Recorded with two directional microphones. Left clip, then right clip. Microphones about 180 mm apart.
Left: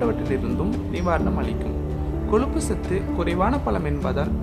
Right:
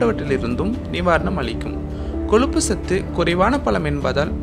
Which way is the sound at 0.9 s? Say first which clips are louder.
Right 6 dB; 15° right (ahead or behind).